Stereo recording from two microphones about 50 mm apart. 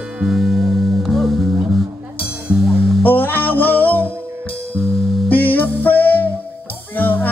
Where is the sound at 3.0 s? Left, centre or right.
Left.